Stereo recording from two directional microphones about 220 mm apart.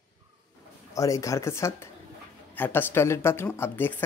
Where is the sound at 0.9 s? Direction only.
15° left (ahead or behind).